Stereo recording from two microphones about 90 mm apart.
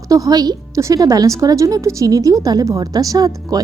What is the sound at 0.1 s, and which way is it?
A woman's voice, 45° right (ahead or behind).